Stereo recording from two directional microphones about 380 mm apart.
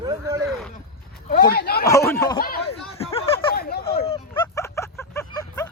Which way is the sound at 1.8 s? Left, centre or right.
Centre.